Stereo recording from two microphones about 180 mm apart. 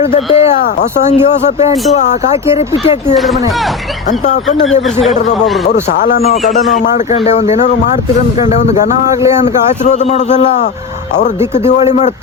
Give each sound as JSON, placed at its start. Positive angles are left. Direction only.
{"t": 0.1, "sound": "a man's voice", "side_deg": 30}
{"t": 1.9, "sound": "a man's voice", "side_deg": 40}
{"t": 5.7, "sound": "speech", "side_deg": 45}
{"t": 6.9, "sound": "a man's voice", "side_deg": 40}
{"t": 9.8, "sound": "a man's voice", "side_deg": 40}
{"t": 11.7, "sound": "a man's voice", "side_deg": 40}